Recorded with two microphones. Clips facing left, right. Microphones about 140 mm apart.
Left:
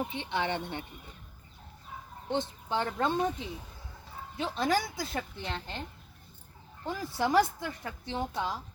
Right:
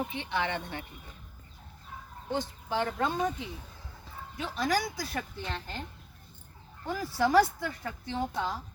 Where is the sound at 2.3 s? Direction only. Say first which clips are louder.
Left 1 dB; 25° left (ahead or behind).